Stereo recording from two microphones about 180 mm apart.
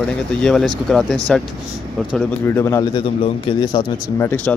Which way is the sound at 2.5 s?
15° left (ahead or behind).